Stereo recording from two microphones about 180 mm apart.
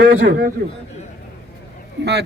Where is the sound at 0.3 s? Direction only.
55° right (ahead or behind).